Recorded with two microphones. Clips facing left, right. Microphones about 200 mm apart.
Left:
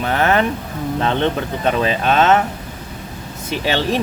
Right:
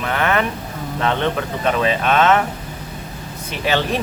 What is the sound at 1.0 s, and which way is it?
Speech, 30° left (ahead or behind).